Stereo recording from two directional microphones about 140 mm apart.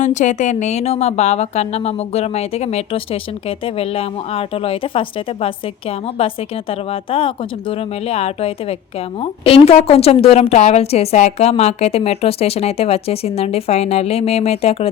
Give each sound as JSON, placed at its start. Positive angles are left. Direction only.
{"t": 0.0, "sound": "a woman's voice", "side_deg": 60}